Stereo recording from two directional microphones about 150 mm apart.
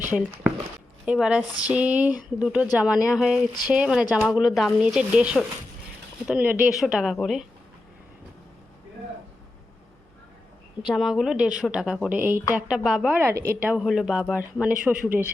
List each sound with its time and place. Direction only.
0.1 s speech: 10° right (ahead or behind)
10.8 s speech: centre (ahead or behind)
13.1 s speech: 15° right (ahead or behind)